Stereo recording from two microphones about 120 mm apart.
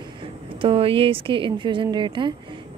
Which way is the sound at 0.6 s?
50° right (ahead or behind).